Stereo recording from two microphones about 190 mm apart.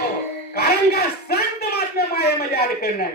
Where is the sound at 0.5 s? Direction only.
55° left (ahead or behind).